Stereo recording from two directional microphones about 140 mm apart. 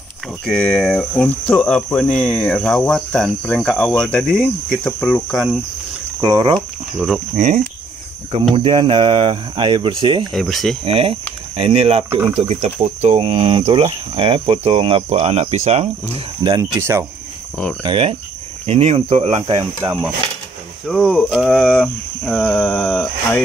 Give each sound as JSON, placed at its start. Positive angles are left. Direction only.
{"t": 0.5, "sound": "speech", "side_deg": 5}
{"t": 6.2, "sound": "speech", "side_deg": -30}
{"t": 7.3, "sound": "speech", "side_deg": -55}
{"t": 8.5, "sound": "speech", "side_deg": -40}
{"t": 10.4, "sound": "speech", "side_deg": 0}
{"t": 10.9, "sound": "speech", "side_deg": -45}
{"t": 16.5, "sound": "speech", "side_deg": -20}
{"t": 17.8, "sound": "speech", "side_deg": -40}
{"t": 20.8, "sound": "speech", "side_deg": 0}